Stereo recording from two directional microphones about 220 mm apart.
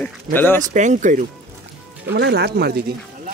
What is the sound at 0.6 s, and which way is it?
Speech, 35° right (ahead or behind).